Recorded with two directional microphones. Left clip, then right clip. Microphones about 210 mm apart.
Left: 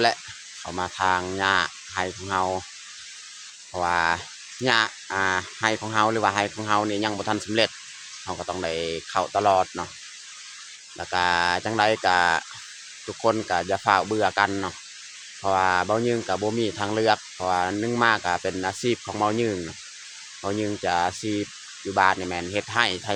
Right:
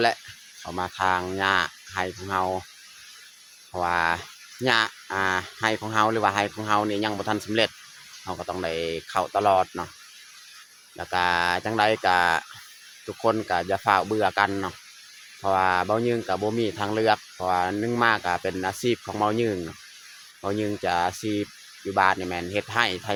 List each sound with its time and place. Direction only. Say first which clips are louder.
0.6 s speech: left 1 dB; centre (ahead or behind)
3.7 s speech: left 1 dB; centre (ahead or behind)
10.9 s speech: left 1 dB; centre (ahead or behind)